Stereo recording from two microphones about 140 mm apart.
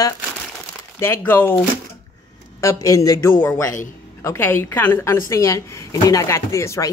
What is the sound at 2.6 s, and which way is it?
A woman's voice, 25° left (ahead or behind).